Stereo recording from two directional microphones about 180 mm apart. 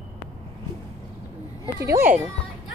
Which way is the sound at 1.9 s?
10° right (ahead or behind).